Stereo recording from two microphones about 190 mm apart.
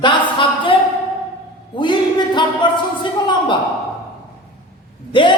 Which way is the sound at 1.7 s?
25° left (ahead or behind).